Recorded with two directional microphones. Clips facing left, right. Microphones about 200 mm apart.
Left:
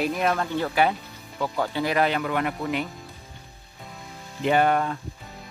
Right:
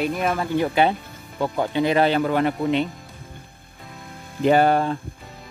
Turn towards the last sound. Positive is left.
turn(degrees=-30)  # may be behind; listen again after turning